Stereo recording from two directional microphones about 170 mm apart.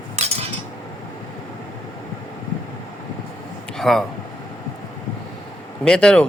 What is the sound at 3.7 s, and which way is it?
Speech, centre (ahead or behind).